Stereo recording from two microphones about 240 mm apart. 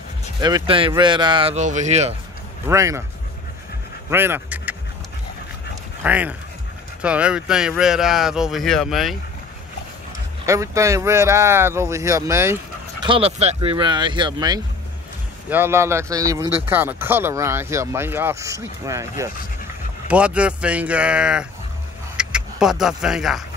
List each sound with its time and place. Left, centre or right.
0.4 s speech: centre
2.7 s speech: centre
4.1 s speech: centre
6.0 s speech: centre
10.4 s speech: centre
13.0 s speech: right; by 21.5 s centre
22.1 s vehicle: centre